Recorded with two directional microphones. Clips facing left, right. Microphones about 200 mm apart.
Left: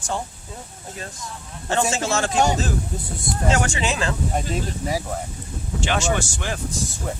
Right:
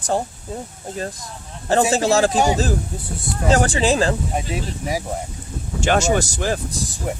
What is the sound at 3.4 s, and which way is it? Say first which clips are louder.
Speech: right 6 dB; 35° right (ahead or behind).